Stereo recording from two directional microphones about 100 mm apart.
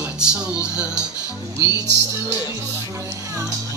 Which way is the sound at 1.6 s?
35° right (ahead or behind).